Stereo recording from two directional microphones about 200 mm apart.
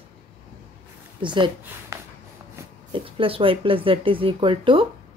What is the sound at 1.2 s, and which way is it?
Speech, 25° right (ahead or behind).